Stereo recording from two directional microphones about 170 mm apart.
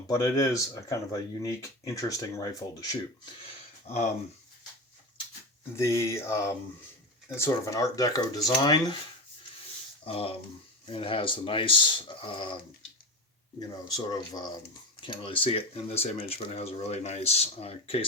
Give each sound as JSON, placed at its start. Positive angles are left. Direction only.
{"t": 0.1, "sound": "speech", "side_deg": 20}
{"t": 5.7, "sound": "speech", "side_deg": 15}
{"t": 10.0, "sound": "speech", "side_deg": 35}
{"t": 13.6, "sound": "speech", "side_deg": 25}